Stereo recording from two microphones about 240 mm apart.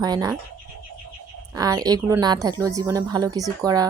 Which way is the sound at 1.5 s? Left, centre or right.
Centre.